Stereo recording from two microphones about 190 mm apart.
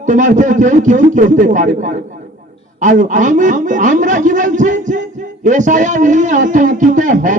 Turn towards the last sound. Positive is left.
turn(degrees=-40)  # may be behind; listen again after turning